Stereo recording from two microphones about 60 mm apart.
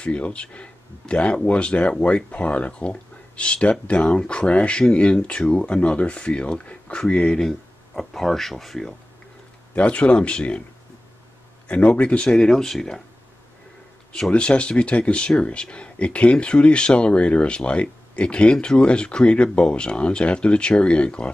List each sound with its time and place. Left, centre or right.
0.0 s speech: centre
7.3 s speech: centre
9.8 s speech: centre
11.6 s speech: left
12.4 s speech: centre
14.3 s speech: centre